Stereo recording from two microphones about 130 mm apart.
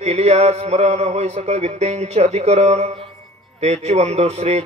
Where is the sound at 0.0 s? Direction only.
55° right (ahead or behind).